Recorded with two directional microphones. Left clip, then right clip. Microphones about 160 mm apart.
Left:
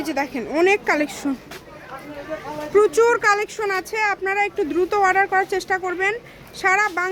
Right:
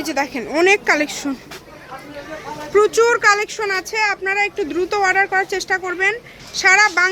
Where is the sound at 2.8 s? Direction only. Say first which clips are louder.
Right 2 dB; 20° left (ahead or behind).